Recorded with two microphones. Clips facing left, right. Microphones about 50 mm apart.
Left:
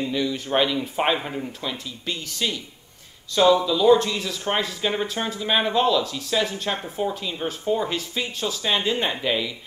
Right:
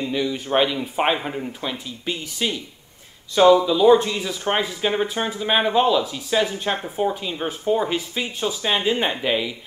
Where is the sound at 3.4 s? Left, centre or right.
Right.